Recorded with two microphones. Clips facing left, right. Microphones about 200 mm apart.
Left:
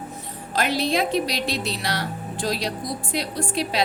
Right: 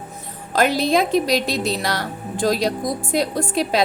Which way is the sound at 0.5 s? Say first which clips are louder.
Right 5 dB; 45° right (ahead or behind).